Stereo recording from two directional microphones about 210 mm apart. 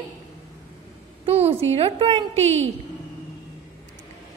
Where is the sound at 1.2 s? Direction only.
30° right (ahead or behind).